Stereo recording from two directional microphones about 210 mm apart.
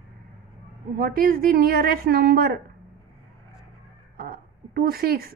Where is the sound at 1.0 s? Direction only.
45° right (ahead or behind).